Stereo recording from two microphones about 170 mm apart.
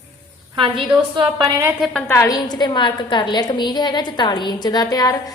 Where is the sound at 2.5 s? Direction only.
25° left (ahead or behind).